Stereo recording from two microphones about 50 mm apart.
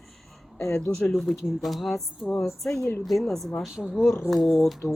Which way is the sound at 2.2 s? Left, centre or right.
Centre.